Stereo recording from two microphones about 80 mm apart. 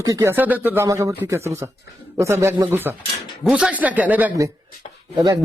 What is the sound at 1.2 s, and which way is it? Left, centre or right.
Speech, right.